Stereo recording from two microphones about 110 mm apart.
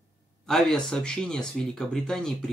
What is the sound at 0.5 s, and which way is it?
Speech, 5° left (ahead or behind).